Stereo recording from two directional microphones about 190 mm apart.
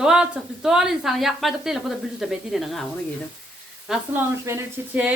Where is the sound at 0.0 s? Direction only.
5° right (ahead or behind).